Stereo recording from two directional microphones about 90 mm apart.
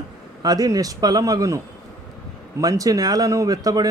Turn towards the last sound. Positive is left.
turn(degrees=-45)  # may be behind; listen again after turning